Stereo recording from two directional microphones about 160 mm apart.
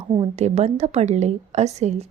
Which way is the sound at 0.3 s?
45° right (ahead or behind).